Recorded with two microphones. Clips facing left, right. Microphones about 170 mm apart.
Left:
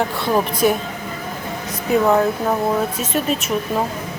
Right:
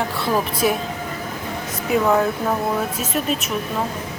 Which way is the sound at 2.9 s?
Centre (ahead or behind).